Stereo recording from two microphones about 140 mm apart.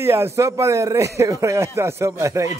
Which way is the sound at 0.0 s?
20° right (ahead or behind).